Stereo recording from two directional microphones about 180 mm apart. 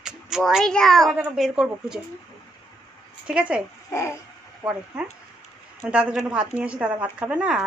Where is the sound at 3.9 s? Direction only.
15° left (ahead or behind).